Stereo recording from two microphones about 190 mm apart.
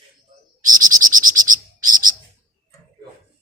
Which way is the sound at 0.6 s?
45° right (ahead or behind).